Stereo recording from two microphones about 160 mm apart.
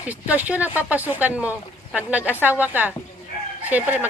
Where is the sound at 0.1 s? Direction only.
10° right (ahead or behind).